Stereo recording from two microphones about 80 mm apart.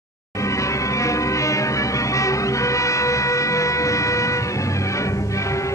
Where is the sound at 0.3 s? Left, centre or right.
Left.